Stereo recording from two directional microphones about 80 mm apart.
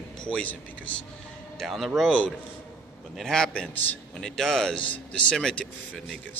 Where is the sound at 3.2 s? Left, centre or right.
Centre.